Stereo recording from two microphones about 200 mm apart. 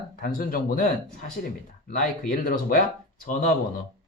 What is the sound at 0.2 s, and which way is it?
Speech, 45° left (ahead or behind).